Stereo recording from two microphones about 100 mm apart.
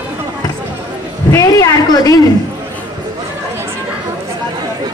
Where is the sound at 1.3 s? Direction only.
35° left (ahead or behind).